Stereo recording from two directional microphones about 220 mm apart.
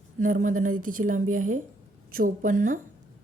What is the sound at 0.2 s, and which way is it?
A woman's voice, 35° right (ahead or behind).